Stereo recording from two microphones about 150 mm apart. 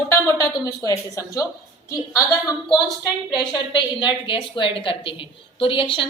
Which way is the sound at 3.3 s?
30° left (ahead or behind).